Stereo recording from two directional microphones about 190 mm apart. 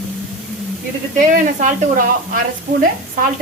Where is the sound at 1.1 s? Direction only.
40° right (ahead or behind).